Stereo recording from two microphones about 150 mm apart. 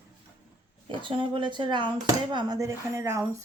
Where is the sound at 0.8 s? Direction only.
35° right (ahead or behind); by 3.4 s 20° right (ahead or behind).